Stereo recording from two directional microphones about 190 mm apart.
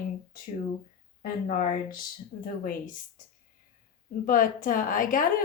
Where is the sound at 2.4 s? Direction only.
45° left (ahead or behind).